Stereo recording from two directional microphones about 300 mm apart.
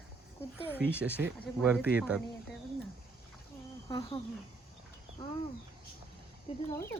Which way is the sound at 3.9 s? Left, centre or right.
Centre.